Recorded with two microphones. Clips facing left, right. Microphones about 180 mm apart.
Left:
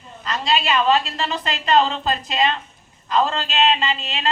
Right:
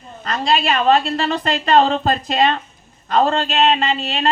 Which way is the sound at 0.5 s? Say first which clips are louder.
Right 2 dB; 50° right (ahead or behind).